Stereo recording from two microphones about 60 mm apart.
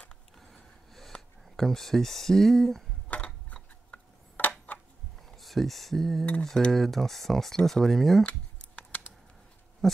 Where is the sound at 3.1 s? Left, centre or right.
Left.